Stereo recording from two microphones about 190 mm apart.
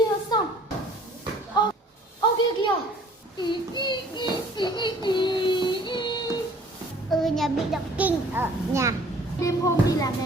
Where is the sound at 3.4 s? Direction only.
25° left (ahead or behind).